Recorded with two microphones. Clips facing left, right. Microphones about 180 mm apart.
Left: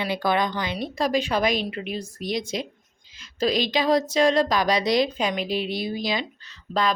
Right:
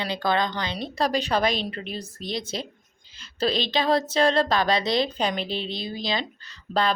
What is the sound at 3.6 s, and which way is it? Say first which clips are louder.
Speech: left 2 dB; 25° right (ahead or behind).